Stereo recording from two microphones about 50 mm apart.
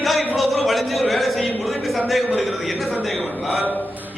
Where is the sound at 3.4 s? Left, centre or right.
Right.